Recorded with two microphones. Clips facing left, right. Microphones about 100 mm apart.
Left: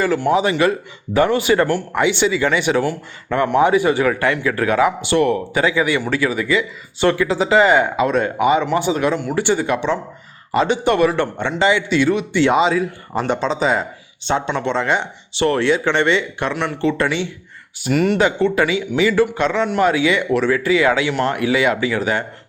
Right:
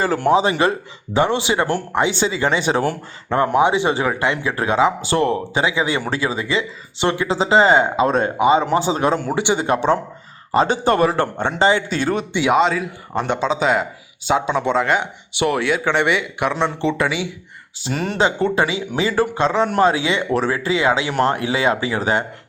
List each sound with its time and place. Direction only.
0.3 s a man's voice: 30° right (ahead or behind)
9.3 s speech: 15° right (ahead or behind)
9.6 s a man's voice: 40° right (ahead or behind)
12.3 s speech: 10° right (ahead or behind)
12.5 s speech: centre (ahead or behind); by 16.9 s 20° right (ahead or behind)
17.0 s speech: 10° right (ahead or behind)
17.8 s a man's voice: 35° right (ahead or behind)